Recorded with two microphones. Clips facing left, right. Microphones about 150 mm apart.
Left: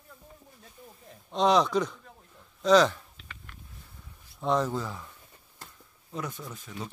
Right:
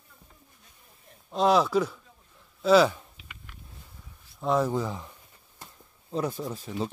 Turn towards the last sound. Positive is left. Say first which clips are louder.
# right 8 dB
turn(degrees=-30)  # may be behind; listen again after turning